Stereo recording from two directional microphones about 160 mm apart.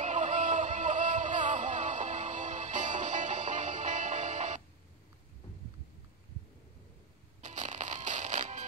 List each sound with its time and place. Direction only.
0.0 s music: 50° right (ahead or behind)
7.4 s music: 45° right (ahead or behind)